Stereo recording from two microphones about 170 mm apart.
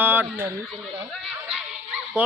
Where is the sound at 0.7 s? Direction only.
Centre (ahead or behind).